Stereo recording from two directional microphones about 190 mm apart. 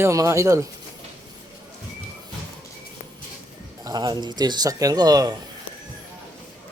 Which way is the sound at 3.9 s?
20° right (ahead or behind).